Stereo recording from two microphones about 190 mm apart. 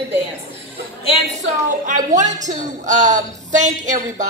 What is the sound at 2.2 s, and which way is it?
A woman's voice, 40° right (ahead or behind).